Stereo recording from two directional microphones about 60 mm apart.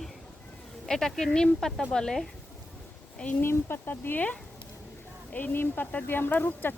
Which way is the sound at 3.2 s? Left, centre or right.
Left.